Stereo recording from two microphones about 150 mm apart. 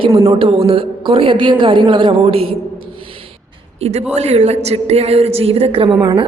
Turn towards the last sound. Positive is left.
turn(degrees=-30)  # may be behind; listen again after turning